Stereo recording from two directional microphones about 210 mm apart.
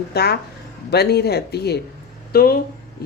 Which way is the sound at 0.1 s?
50° left (ahead or behind).